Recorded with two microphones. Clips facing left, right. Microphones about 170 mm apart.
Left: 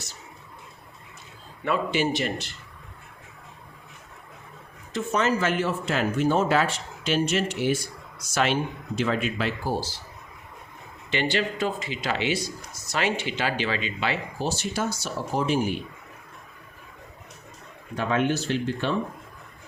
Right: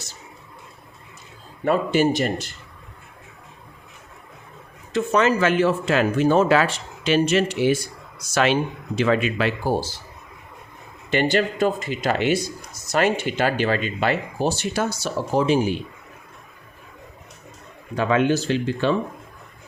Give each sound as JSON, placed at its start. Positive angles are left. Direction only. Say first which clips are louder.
{"t": 1.6, "sound": "speech", "louder": "right 6 dB", "side_deg": -40}
{"t": 4.9, "sound": "speech", "louder": "right 5 dB", "side_deg": -80}
{"t": 8.3, "sound": "speech", "louder": "right 4 dB", "side_deg": -75}
{"t": 11.1, "sound": "speech", "louder": "right 6 dB", "side_deg": -50}
{"t": 17.9, "sound": "speech", "louder": "right 5 dB", "side_deg": -90}